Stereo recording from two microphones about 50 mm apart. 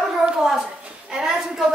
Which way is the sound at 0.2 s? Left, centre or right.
Centre.